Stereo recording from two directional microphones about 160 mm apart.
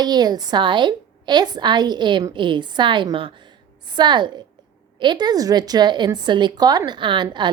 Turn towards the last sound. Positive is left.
turn(degrees=-30)  # may be behind; listen again after turning